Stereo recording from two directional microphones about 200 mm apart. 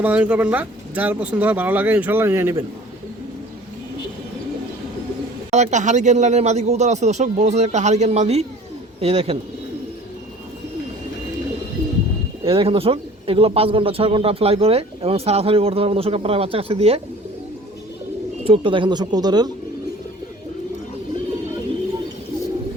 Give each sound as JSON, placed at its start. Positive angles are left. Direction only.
{"t": 0.0, "sound": "speech", "side_deg": -5}
{"t": 5.5, "sound": "a man's voice", "side_deg": -35}
{"t": 12.5, "sound": "a man's voice", "side_deg": -25}
{"t": 18.4, "sound": "a man's voice", "side_deg": -25}